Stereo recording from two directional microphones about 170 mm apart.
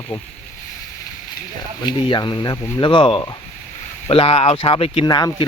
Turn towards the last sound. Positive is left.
turn(degrees=25)  # may be behind; listen again after turning